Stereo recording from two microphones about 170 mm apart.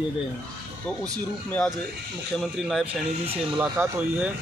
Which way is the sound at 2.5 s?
Centre (ahead or behind).